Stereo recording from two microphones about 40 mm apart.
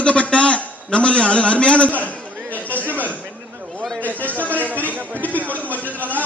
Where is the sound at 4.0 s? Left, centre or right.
Left.